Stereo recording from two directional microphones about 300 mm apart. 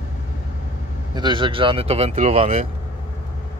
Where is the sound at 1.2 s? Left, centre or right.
Centre.